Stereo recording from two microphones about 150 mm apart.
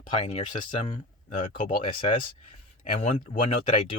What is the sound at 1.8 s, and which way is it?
Speech, 35° left (ahead or behind).